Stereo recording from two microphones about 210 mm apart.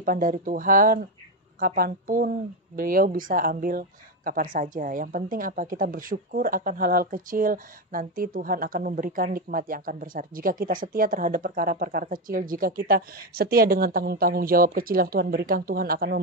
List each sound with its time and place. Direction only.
0.0 s speech: 40° right (ahead or behind)